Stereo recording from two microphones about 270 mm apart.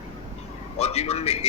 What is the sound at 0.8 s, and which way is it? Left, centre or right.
Speech, left.